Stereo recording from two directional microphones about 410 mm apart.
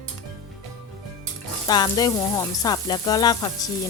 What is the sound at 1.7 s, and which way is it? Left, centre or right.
Speech, centre.